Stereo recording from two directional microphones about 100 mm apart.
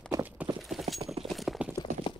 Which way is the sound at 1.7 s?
50° left (ahead or behind).